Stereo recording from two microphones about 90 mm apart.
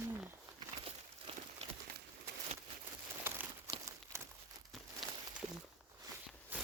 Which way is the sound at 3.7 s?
35° right (ahead or behind).